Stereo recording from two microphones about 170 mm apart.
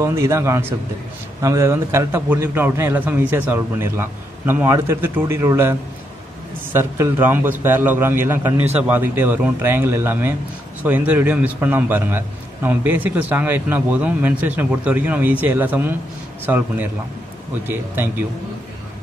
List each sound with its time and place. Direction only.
0.0 s a man's voice: 15° right (ahead or behind)